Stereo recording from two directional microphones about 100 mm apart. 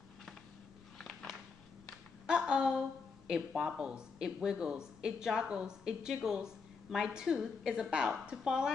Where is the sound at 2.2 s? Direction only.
10° right (ahead or behind).